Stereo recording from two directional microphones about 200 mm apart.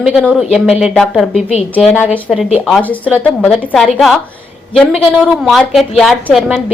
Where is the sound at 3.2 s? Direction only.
Centre (ahead or behind).